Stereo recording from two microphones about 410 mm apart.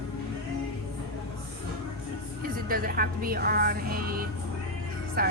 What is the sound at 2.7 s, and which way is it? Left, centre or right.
Speech, right.